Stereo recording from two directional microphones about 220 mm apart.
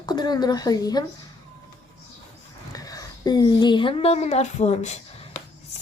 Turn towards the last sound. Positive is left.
turn(degrees=30)  # may be behind; listen again after turning